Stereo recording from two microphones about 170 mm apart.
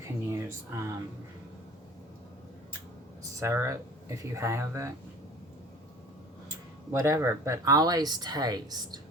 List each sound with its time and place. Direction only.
0.3 s speech: 15° right (ahead or behind)
3.4 s speech: 15° right (ahead or behind)
6.9 s speech: 15° right (ahead or behind)